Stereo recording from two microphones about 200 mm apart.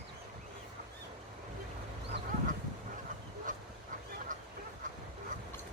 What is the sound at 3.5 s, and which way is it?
Dog, 40° right (ahead or behind).